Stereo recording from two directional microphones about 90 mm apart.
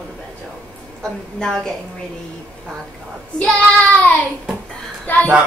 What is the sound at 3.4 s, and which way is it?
Child singing, 10° left (ahead or behind).